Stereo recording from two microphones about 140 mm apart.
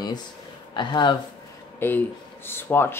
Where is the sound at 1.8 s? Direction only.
15° left (ahead or behind).